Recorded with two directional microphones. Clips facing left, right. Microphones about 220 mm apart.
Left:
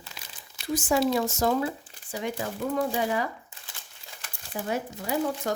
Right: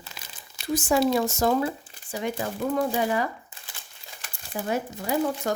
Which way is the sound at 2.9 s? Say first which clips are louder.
Right 2 dB; 50° right (ahead or behind).